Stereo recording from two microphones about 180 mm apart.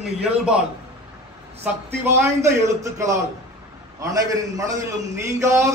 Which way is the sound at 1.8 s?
15° right (ahead or behind).